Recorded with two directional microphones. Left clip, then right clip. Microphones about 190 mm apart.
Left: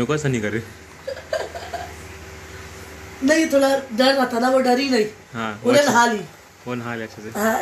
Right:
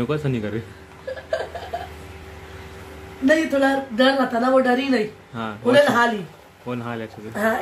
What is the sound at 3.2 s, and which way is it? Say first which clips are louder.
Speech: left 1 dB; 5° right (ahead or behind).